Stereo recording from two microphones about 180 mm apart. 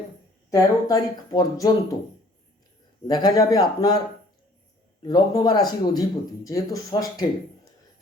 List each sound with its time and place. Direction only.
0.5 s speech: 20° left (ahead or behind)
3.1 s speech: 20° left (ahead or behind)
5.0 s speech: 20° left (ahead or behind)